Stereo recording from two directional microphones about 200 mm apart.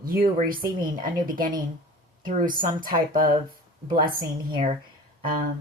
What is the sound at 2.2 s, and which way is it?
Speech, 40° right (ahead or behind).